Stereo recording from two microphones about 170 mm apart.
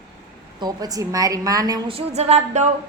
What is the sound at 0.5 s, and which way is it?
A woman's voice, 25° right (ahead or behind).